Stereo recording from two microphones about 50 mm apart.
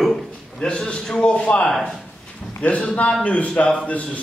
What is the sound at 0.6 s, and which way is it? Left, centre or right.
A man's voice, centre.